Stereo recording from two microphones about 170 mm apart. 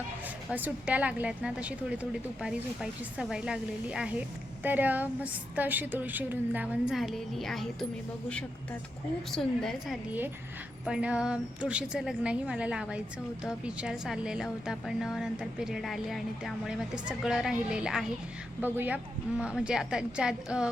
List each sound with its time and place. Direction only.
0.5 s a woman's voice: 10° right (ahead or behind)
9.3 s a woman's voice: centre (ahead or behind)